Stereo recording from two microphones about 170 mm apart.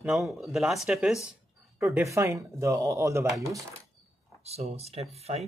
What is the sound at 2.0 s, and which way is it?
Speech, 15° right (ahead or behind).